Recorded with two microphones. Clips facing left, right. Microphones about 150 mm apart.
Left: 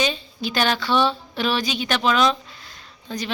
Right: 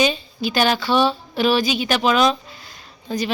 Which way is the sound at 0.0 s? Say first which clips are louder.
Right 4 dB; 5° right (ahead or behind).